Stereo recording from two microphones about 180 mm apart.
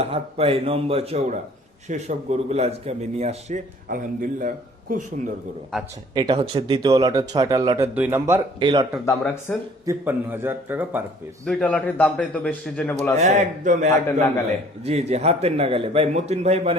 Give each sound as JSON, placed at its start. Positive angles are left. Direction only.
{"t": 0.0, "sound": "a man's voice", "side_deg": -35}
{"t": 3.8, "sound": "a man's voice", "side_deg": -50}
{"t": 6.1, "sound": "speech", "side_deg": -25}
{"t": 7.9, "sound": "a man's voice", "side_deg": -10}
{"t": 8.5, "sound": "speech", "side_deg": -25}
{"t": 9.0, "sound": "speech", "side_deg": 10}
{"t": 9.8, "sound": "a man's voice", "side_deg": -15}
{"t": 11.4, "sound": "a man's voice", "side_deg": 5}
{"t": 13.1, "sound": "a man's voice", "side_deg": -40}